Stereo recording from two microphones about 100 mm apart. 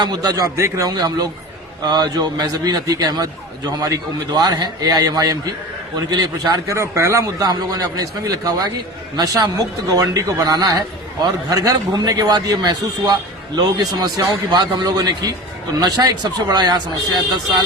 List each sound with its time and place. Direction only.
0.0 s a man's voice: 45° right (ahead or behind)
6.7 s a man's voice: 30° right (ahead or behind)